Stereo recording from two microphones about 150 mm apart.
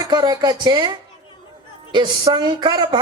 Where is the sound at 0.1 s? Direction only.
25° right (ahead or behind).